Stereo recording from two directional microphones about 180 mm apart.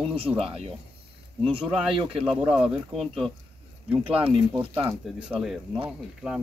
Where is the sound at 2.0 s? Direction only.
30° right (ahead or behind).